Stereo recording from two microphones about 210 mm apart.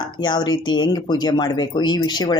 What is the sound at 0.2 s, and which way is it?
Speech, 20° left (ahead or behind).